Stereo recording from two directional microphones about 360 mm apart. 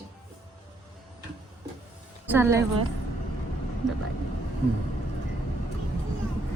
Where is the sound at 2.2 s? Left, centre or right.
Centre.